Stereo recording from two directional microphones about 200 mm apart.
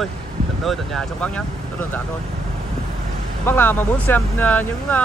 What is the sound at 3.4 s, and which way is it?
Speech, 10° left (ahead or behind).